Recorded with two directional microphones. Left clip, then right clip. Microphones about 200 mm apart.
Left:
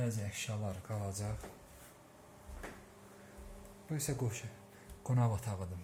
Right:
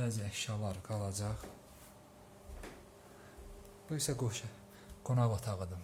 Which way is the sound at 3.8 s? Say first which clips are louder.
Right 2 dB; centre (ahead or behind).